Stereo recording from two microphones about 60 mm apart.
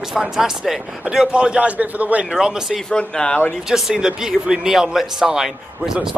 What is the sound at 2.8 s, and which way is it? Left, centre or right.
Speech, centre.